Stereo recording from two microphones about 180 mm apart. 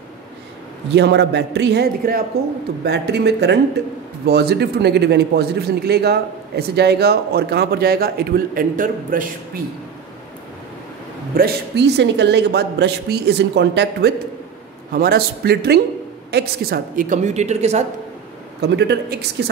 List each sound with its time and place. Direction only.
0.9 s a woman's voice: 70° right (ahead or behind); by 9.3 s 50° right (ahead or behind)
11.3 s a woman's voice: 65° right (ahead or behind)
14.9 s a woman's voice: 55° right (ahead or behind); by 17.8 s 40° right (ahead or behind)
18.6 s a woman's voice: 70° right (ahead or behind)